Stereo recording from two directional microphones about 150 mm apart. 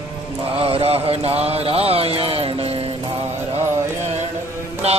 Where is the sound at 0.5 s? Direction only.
40° right (ahead or behind).